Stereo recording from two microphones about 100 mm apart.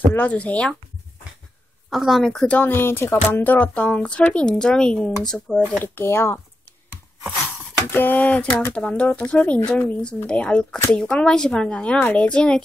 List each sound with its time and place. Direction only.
0.1 s speech: 15° left (ahead or behind)
1.9 s speech: centre (ahead or behind)
5.9 s speech: 25° left (ahead or behind)
7.9 s speech: 20° left (ahead or behind)